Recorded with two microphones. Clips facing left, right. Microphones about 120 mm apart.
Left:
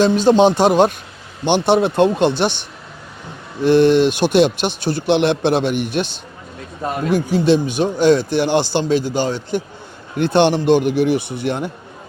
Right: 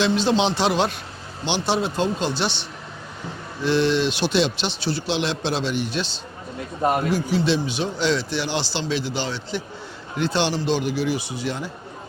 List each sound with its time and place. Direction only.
0.0 s a man's voice: 45° left (ahead or behind)
3.6 s a man's voice: 50° left (ahead or behind)